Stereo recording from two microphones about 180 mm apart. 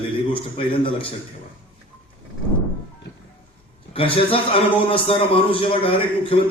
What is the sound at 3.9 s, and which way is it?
A man's voice, 30° left (ahead or behind).